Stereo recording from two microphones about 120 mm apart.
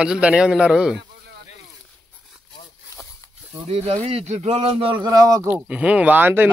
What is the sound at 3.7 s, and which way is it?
Speech, 60° right (ahead or behind).